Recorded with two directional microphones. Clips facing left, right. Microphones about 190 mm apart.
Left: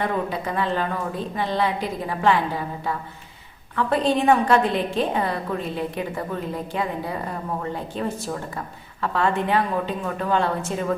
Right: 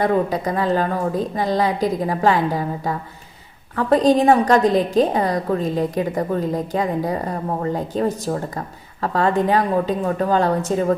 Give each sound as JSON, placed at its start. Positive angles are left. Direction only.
{"t": 0.0, "sound": "a woman's voice", "side_deg": -40}